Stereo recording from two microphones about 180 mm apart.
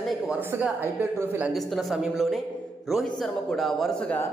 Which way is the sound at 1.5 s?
Centre (ahead or behind).